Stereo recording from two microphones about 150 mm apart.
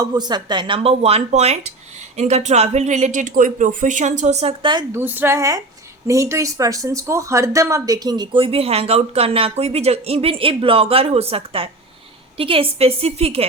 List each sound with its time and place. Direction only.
0.0 s speech: 30° right (ahead or behind); by 4.5 s 50° right (ahead or behind)
4.6 s speech: 30° right (ahead or behind)
4.9 s a woman's voice: 15° right (ahead or behind); by 13.5 s 40° right (ahead or behind)